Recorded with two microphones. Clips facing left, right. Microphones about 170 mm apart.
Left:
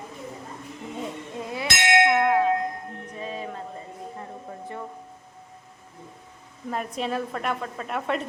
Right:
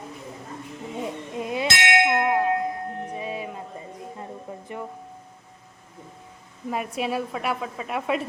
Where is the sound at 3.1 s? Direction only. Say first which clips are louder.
Right 2 dB; 10° right (ahead or behind).